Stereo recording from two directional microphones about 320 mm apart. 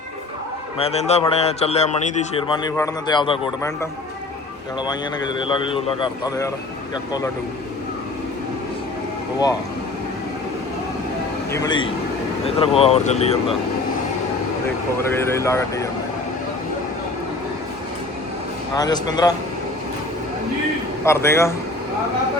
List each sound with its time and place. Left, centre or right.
0.8 s a man's voice: centre
5.4 s speech: centre
11.5 s a man's voice: centre
15.4 s speech: centre
18.7 s speech: centre
21.0 s speech: centre